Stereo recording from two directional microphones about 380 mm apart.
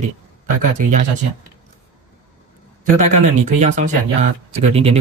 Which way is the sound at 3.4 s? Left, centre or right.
Centre.